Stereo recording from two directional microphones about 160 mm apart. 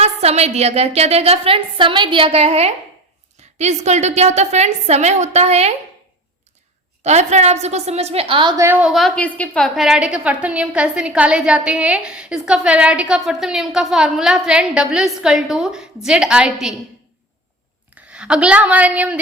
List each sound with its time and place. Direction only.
0.0 s a woman's voice: 40° right (ahead or behind)
7.0 s a woman's voice: 45° right (ahead or behind)
8.5 s a woman's voice: 15° right (ahead or behind)
8.9 s a woman's voice: centre (ahead or behind)
17.9 s a woman's voice: 5° right (ahead or behind)